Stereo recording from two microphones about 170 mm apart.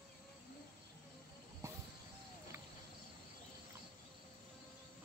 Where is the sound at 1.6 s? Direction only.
15° right (ahead or behind).